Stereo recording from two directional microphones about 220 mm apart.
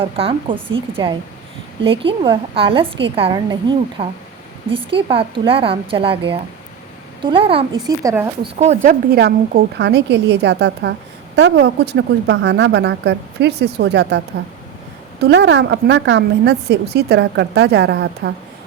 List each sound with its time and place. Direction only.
0.0 s a woman's voice: 25° right (ahead or behind)
7.9 s speech: 15° right (ahead or behind)
8.5 s a woman's voice: 30° right (ahead or behind); by 14.2 s 50° right (ahead or behind)
15.2 s a woman's voice: 50° right (ahead or behind)